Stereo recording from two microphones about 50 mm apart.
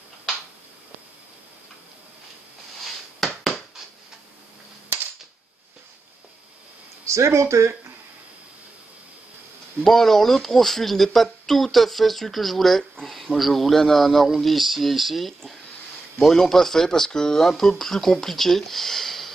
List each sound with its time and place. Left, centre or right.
2.8 s a sound: centre
7.1 s speech: right
9.8 s speech: centre